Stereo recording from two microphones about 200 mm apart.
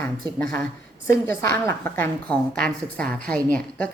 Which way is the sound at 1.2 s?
10° left (ahead or behind).